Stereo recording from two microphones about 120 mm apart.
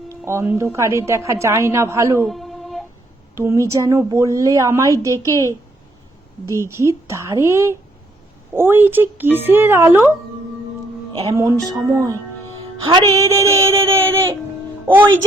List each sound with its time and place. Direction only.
0.1 s a woman's voice: 25° right (ahead or behind)
2.2 s a sound: centre (ahead or behind)
3.3 s a woman's voice: 25° right (ahead or behind)
6.6 s a woman's voice: 25° right (ahead or behind)
11.2 s a woman's voice: 30° right (ahead or behind)